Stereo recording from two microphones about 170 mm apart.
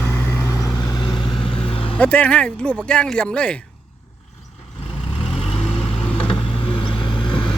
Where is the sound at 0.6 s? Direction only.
25° left (ahead or behind).